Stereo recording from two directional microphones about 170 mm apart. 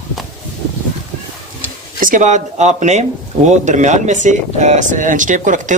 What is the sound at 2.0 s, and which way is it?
Speech, 50° right (ahead or behind).